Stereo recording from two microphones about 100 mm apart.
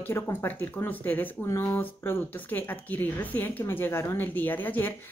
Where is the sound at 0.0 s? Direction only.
25° left (ahead or behind).